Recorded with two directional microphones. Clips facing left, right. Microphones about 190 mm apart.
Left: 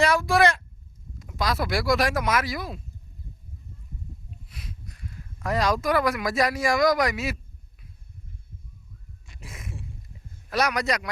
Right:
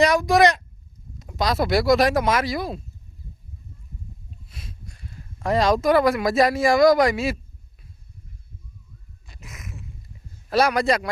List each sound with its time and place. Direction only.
0.0 s speech: 20° right (ahead or behind)
4.4 s speech: 25° right (ahead or behind)
9.4 s a sound: 30° left (ahead or behind)
10.5 s speech: 30° right (ahead or behind)